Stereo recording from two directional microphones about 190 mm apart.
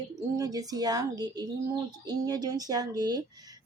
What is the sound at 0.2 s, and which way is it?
Speech, 20° right (ahead or behind).